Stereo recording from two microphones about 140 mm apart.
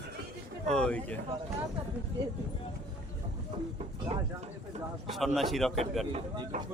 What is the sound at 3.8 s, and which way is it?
Speech, 45° right (ahead or behind).